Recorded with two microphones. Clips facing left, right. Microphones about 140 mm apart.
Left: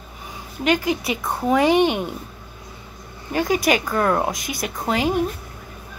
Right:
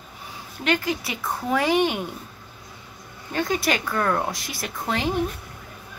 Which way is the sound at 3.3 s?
15° left (ahead or behind).